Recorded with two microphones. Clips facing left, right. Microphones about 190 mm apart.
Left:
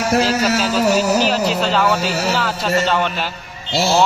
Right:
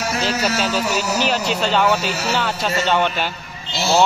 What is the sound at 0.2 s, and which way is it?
Speech, centre (ahead or behind).